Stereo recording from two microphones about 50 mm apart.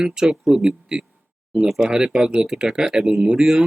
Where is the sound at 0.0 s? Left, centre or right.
Centre.